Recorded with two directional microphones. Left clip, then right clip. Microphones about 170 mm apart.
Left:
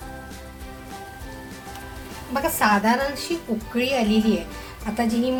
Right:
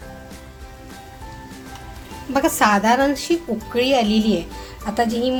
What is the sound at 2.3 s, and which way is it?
Speech, 45° right (ahead or behind).